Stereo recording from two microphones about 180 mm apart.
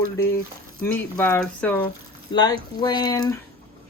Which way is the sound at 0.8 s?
10° left (ahead or behind).